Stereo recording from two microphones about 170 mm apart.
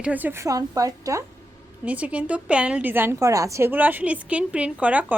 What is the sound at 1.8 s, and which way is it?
A woman's voice, 10° right (ahead or behind).